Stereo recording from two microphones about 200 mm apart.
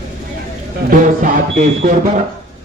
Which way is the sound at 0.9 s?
40° right (ahead or behind).